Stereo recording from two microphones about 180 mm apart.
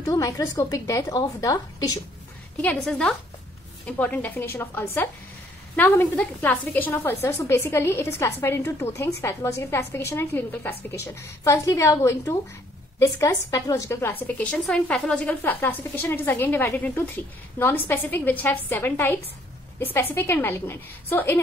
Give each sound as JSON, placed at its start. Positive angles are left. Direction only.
{"t": 0.0, "sound": "a woman's voice", "side_deg": 20}
{"t": 2.6, "sound": "a woman's voice", "side_deg": 5}